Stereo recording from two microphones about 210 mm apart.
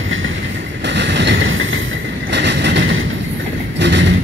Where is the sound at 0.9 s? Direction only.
55° right (ahead or behind).